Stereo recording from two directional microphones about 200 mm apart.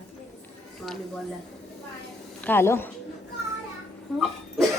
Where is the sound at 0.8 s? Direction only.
Centre (ahead or behind).